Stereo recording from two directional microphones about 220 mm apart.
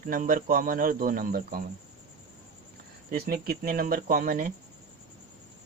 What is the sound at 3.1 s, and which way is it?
Speech, 45° right (ahead or behind).